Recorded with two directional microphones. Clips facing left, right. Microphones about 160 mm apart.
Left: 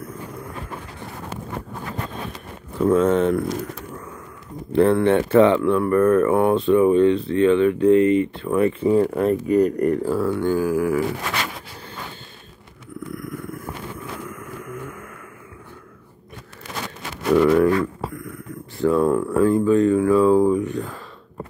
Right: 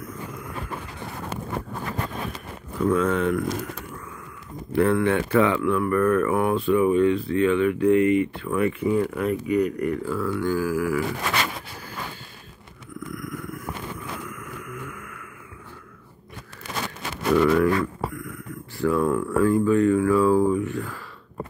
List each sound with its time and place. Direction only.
0.0 s vehicle: 30° left (ahead or behind)
2.8 s speech: 30° left (ahead or behind)
4.7 s speech: 25° left (ahead or behind)
13.1 s purr: 30° left (ahead or behind)
14.2 s a sound: 30° left (ahead or behind)
17.4 s speech: 20° left (ahead or behind)